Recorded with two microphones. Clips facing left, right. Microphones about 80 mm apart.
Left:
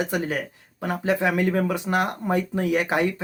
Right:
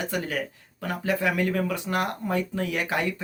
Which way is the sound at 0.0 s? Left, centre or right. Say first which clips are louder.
Left 3 dB; left.